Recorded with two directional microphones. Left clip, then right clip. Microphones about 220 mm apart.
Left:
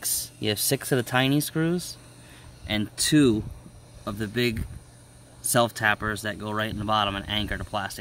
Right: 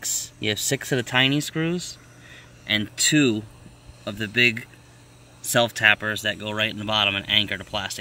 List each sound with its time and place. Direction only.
0.0 s speech: centre (ahead or behind)